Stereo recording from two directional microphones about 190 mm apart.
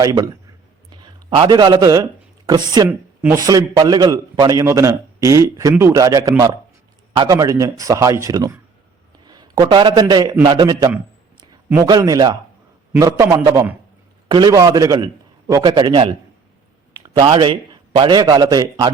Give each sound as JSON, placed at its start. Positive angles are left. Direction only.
{"t": 0.0, "sound": "a man's voice", "side_deg": -20}